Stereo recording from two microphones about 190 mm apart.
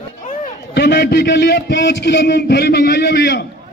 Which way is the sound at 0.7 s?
60° left (ahead or behind).